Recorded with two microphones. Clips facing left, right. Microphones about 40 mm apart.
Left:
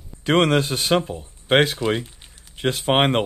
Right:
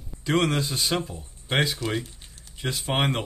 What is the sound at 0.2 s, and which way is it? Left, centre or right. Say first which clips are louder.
Speech: left 6 dB; left.